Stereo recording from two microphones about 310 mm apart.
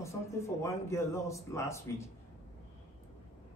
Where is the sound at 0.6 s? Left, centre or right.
Centre.